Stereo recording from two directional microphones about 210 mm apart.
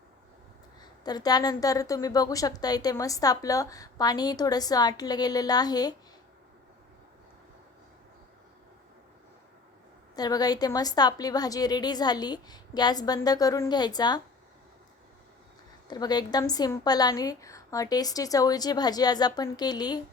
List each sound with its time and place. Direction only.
0.8 s a woman's voice: 20° left (ahead or behind)
10.2 s a woman's voice: 20° left (ahead or behind)
15.9 s a woman's voice: 20° left (ahead or behind)